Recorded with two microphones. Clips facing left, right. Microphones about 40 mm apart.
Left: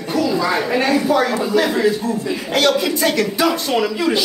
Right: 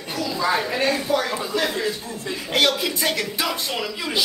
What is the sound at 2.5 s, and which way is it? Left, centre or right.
A woman's voice, centre.